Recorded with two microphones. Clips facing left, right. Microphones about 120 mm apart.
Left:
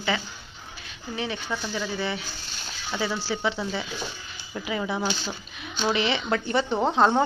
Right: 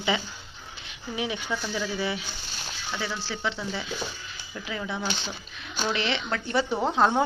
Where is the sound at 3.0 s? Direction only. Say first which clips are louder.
Left 6 dB; 10° left (ahead or behind).